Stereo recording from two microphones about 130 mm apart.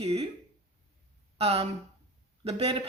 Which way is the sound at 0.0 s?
50° right (ahead or behind).